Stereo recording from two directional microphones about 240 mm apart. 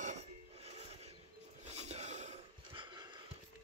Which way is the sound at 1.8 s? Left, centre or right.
Right.